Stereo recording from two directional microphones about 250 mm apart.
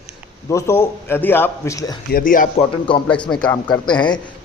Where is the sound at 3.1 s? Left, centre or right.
Centre.